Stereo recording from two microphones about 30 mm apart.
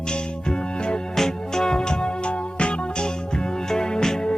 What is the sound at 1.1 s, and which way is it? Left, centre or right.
Music, centre.